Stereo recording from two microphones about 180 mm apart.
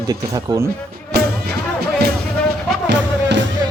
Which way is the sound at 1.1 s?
65° right (ahead or behind).